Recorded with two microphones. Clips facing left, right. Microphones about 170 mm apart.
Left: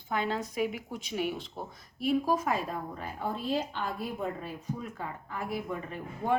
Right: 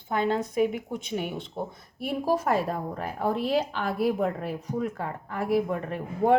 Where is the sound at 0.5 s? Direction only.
55° right (ahead or behind).